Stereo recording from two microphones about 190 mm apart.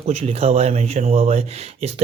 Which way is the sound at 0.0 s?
35° right (ahead or behind).